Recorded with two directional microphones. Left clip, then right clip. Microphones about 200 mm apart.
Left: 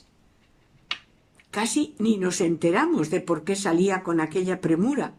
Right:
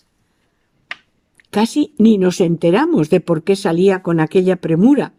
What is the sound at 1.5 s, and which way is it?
Speech, 45° right (ahead or behind).